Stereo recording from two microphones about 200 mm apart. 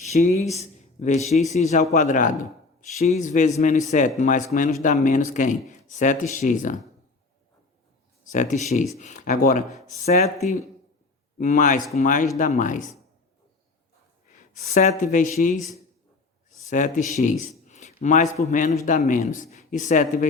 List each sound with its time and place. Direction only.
0.0 s speech: 35° left (ahead or behind)
8.3 s speech: 40° left (ahead or behind)
11.3 s speech: 40° left (ahead or behind)
14.3 s a man's voice: 40° left (ahead or behind)